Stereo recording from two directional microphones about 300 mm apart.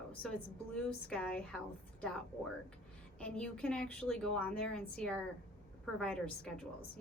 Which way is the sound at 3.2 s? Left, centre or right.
Centre.